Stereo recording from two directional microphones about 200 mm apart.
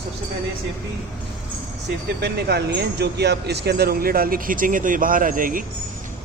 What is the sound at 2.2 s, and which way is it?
A man's voice, 55° right (ahead or behind).